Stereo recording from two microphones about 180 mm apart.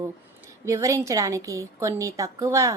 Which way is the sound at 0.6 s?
15° right (ahead or behind).